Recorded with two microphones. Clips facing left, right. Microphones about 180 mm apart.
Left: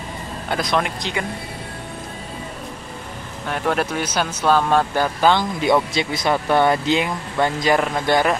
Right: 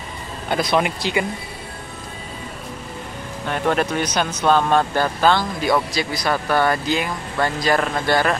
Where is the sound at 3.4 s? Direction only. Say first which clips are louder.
Right 1 dB; 5° left (ahead or behind).